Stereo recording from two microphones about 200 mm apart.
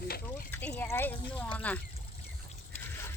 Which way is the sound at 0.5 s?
10° left (ahead or behind).